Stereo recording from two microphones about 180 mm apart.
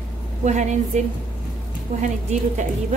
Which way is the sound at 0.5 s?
40° right (ahead or behind).